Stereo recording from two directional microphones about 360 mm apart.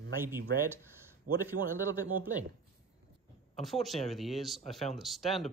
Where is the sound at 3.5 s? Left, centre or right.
Centre.